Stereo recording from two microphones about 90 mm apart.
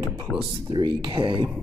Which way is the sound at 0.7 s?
65° right (ahead or behind).